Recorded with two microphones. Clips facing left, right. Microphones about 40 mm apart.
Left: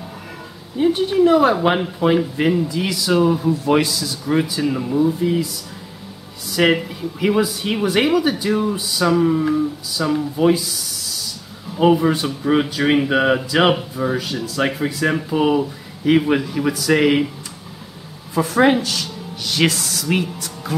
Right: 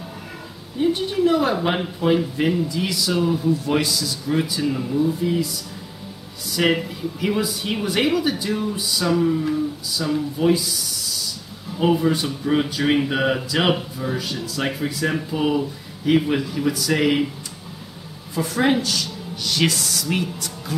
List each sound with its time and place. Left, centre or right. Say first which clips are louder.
0.7 s speech: left 5 dB; centre
6.5 s speech: left 3 dB; centre
9.3 s speech: left 4 dB; centre
18.3 s speech: left 5 dB; centre